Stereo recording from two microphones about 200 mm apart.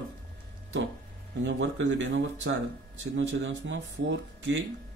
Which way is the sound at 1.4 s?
65° right (ahead or behind).